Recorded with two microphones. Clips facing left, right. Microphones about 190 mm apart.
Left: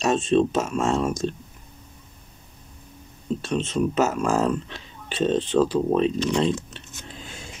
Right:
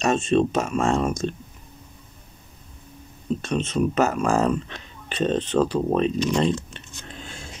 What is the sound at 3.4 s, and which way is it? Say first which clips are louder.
Speech: even; centre (ahead or behind).